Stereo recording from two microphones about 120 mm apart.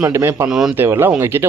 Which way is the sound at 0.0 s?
25° right (ahead or behind).